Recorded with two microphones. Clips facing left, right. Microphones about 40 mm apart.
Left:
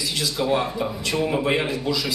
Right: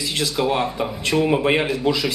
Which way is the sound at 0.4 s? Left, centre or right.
Right.